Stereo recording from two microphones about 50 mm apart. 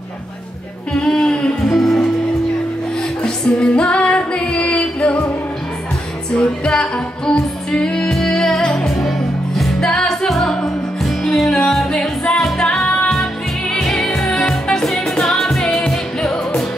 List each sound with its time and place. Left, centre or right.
1.0 s a sound: centre
1.7 s music: centre
3.2 s music: left
6.7 s music: centre
11.6 s music: centre
12.8 s music: left
13.2 s music: centre